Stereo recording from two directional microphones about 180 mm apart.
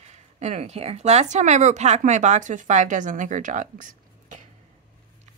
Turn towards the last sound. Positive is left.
turn(degrees=-45)  # may be behind; listen again after turning